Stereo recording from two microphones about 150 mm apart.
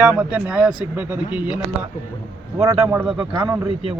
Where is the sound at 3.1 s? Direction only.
35° right (ahead or behind).